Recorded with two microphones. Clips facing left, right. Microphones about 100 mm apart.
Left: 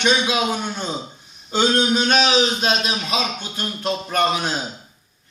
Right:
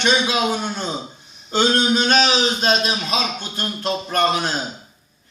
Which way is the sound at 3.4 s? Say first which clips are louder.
Right 1 dB; 5° left (ahead or behind).